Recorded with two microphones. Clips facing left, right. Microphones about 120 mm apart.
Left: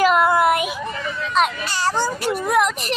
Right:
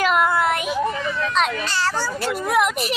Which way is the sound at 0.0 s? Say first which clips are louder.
Left 3 dB; centre (ahead or behind).